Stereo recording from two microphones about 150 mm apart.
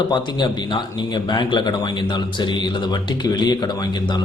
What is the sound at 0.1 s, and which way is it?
Speech, 30° left (ahead or behind).